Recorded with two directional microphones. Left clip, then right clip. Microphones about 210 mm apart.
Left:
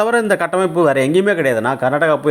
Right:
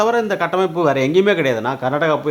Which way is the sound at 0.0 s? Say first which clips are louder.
Left 2 dB; 20° left (ahead or behind).